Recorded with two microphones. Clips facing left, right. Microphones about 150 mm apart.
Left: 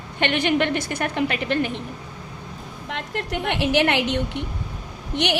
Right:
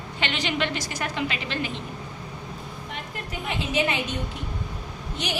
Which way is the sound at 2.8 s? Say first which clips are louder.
Left 9 dB; 85° left.